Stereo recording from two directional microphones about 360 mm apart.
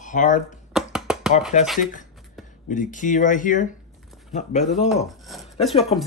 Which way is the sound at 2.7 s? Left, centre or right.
Left.